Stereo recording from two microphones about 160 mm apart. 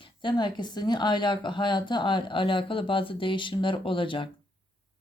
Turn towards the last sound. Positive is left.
turn(degrees=30)  # may be behind; listen again after turning